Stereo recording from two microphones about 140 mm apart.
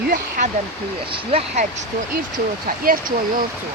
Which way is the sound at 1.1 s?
45° right (ahead or behind).